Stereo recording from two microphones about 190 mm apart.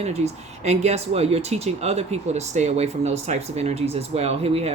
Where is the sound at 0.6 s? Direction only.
35° right (ahead or behind).